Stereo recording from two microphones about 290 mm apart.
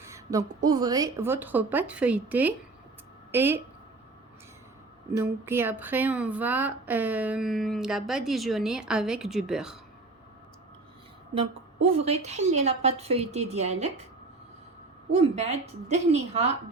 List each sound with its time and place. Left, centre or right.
0.0 s a woman's voice: centre
5.1 s a woman's voice: centre
12.0 s a woman's voice: right
15.1 s a woman's voice: right